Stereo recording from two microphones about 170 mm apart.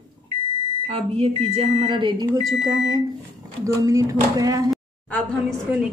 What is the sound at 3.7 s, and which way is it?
Speech, 20° right (ahead or behind).